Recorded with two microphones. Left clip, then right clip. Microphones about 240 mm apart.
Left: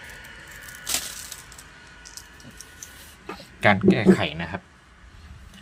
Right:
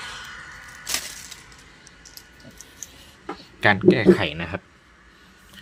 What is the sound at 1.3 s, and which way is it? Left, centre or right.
Splinter, centre.